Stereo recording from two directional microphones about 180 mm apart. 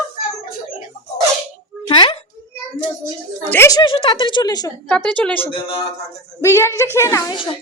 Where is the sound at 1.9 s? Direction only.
30° left (ahead or behind).